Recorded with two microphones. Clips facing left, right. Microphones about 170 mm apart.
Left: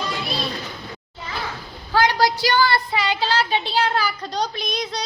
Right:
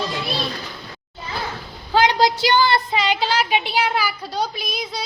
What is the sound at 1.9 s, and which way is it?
Speech, 20° right (ahead or behind).